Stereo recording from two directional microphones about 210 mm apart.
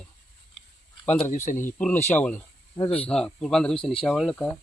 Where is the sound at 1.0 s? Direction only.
5° left (ahead or behind).